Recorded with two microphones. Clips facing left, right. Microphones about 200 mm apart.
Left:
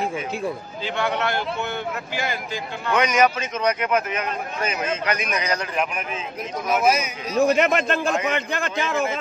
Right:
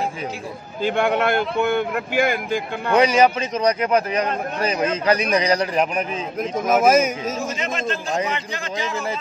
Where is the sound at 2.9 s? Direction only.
30° right (ahead or behind); by 7.3 s 50° right (ahead or behind).